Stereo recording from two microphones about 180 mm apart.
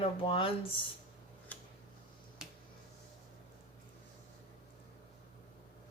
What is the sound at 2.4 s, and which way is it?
Finger snapping, 5° right (ahead or behind).